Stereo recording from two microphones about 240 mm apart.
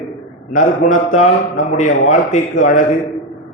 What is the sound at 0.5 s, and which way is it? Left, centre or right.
A man's voice, left.